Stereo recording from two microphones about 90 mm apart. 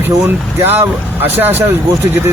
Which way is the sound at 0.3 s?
25° right (ahead or behind).